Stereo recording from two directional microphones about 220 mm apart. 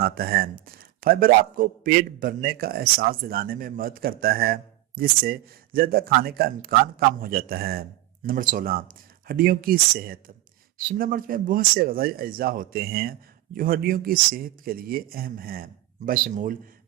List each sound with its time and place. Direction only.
0.0 s a man's voice: 45° right (ahead or behind)